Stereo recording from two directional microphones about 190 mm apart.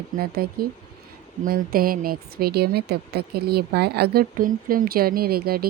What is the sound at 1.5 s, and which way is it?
Speech, 50° right (ahead or behind).